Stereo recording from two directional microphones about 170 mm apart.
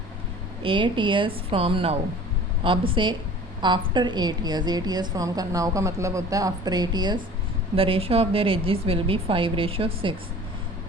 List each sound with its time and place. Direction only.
0.6 s a woman's voice: 30° right (ahead or behind)